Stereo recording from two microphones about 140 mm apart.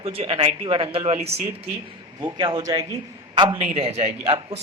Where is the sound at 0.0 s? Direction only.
45° right (ahead or behind).